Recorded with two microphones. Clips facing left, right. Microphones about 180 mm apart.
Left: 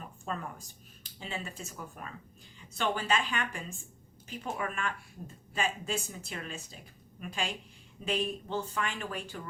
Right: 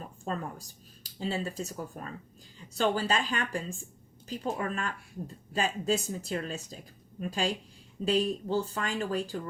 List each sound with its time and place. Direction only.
0.3 s speech: 35° right (ahead or behind)